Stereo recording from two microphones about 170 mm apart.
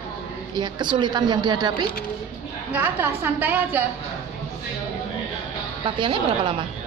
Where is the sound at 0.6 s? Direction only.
25° right (ahead or behind).